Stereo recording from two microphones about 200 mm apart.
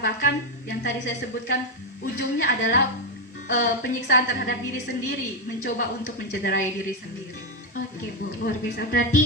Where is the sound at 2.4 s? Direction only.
55° left (ahead or behind).